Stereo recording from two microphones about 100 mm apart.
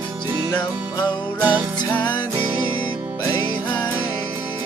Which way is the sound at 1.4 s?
15° right (ahead or behind).